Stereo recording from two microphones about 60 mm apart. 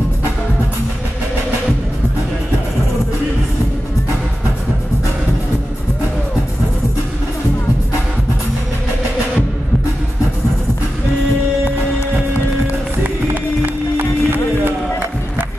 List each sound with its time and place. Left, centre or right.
13.9 s music: right